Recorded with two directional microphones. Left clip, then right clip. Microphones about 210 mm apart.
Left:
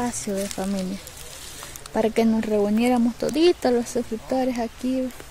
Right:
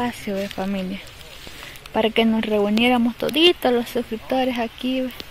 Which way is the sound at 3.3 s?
10° left (ahead or behind).